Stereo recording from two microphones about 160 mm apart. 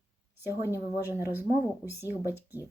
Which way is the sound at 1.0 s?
15° right (ahead or behind).